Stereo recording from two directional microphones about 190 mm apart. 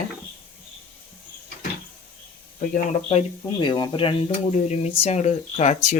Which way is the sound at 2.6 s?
40° left (ahead or behind).